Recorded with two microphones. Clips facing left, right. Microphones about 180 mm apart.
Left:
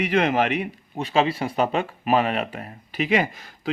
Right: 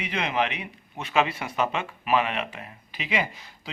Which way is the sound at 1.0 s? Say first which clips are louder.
Left 3 dB; 30° left (ahead or behind).